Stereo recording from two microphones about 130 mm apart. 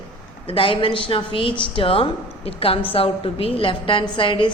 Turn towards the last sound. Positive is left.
turn(degrees=40)  # may be behind; listen again after turning